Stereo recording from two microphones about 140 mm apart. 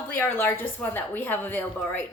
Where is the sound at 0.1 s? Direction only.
15° left (ahead or behind).